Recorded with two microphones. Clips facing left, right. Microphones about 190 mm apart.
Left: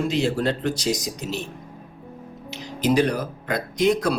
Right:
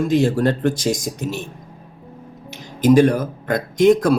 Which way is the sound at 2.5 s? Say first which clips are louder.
Right 7 dB; 45° right (ahead or behind).